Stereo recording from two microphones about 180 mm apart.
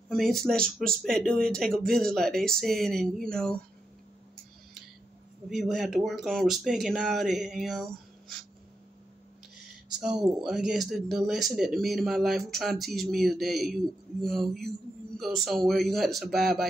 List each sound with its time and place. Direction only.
0.1 s speech: centre (ahead or behind)
5.5 s speech: centre (ahead or behind)
9.9 s speech: 5° right (ahead or behind)